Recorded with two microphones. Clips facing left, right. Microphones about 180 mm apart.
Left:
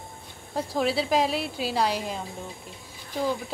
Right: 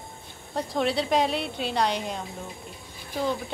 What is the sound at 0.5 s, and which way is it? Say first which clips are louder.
A woman's voice: even; 5° left (ahead or behind).